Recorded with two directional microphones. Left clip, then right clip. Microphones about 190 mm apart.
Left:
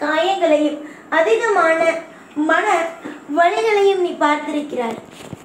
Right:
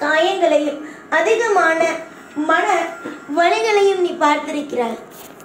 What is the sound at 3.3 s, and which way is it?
A woman's voice, 25° right (ahead or behind).